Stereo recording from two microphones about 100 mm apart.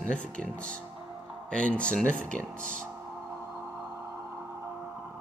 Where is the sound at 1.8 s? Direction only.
10° left (ahead or behind).